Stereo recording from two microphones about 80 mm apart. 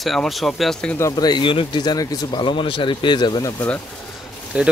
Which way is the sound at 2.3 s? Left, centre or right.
Left.